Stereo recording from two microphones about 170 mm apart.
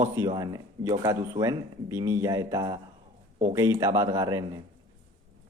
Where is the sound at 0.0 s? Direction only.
15° right (ahead or behind).